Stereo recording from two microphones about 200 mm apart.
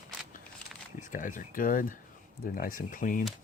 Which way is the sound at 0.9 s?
40° left (ahead or behind).